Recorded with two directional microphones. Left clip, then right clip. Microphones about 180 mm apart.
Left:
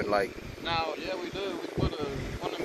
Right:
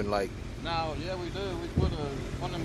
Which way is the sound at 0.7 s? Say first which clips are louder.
Left 2 dB; 10° right (ahead or behind).